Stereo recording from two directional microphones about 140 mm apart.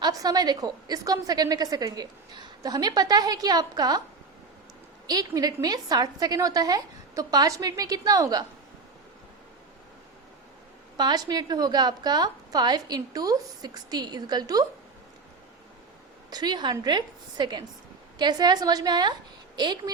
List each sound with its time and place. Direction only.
0.0 s a woman's voice: 25° right (ahead or behind)
5.0 s a woman's voice: 30° right (ahead or behind)
10.9 s a woman's voice: 30° right (ahead or behind)
16.3 s a woman's voice: 30° right (ahead or behind)